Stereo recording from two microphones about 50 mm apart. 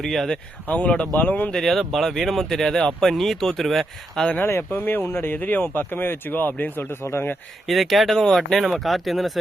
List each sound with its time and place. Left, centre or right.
0.0 s speech: centre
0.9 s speech: left
1.5 s speech: centre
4.7 s speech: left
7.0 s speech: left
7.7 s speech: centre
8.5 s speech: centre